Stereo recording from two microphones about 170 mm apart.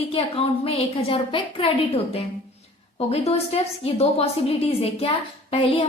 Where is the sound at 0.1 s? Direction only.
35° left (ahead or behind).